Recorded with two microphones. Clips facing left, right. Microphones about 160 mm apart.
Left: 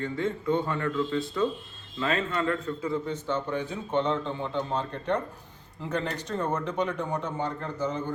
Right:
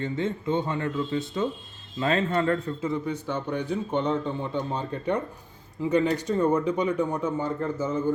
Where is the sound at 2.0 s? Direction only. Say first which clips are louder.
Right 4 dB; 35° right (ahead or behind).